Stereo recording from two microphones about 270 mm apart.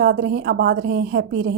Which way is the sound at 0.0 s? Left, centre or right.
Right.